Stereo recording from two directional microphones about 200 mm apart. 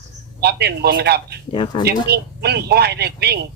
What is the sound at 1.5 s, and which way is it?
Speech, 25° left (ahead or behind).